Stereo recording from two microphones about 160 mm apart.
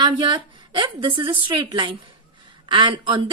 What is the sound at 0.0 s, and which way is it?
A woman's voice, 30° right (ahead or behind).